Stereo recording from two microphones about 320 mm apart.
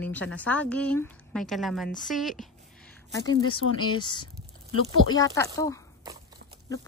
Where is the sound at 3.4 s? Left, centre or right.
Left.